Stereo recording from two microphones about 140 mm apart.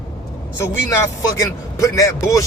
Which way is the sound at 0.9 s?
20° left (ahead or behind).